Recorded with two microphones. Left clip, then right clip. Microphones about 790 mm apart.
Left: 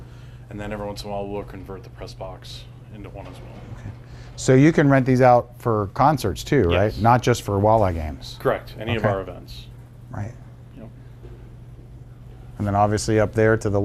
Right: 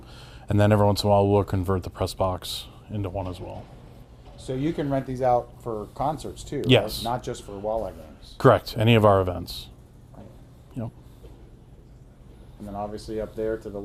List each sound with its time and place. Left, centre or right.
0.4 s speech: right
4.4 s speech: left
6.7 s speech: right
7.0 s speech: left
8.4 s speech: right
12.7 s speech: left